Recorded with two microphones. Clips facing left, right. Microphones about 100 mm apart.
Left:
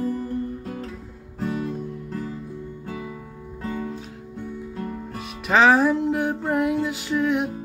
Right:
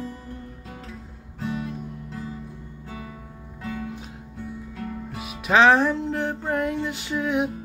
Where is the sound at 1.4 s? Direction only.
40° left (ahead or behind).